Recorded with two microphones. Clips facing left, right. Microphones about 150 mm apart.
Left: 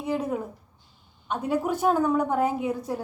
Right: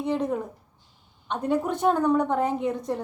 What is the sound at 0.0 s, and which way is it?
A woman's voice, 5° left (ahead or behind).